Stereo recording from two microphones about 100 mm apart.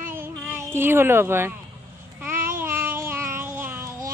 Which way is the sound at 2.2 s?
25° right (ahead or behind).